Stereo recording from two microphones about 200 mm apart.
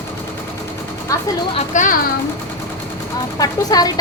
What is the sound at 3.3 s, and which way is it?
Speech, 20° left (ahead or behind).